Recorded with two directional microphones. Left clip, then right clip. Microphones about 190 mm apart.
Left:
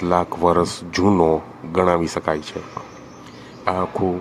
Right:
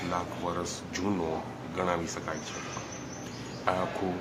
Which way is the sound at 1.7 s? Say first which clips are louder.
Left 13 dB; 40° left (ahead or behind).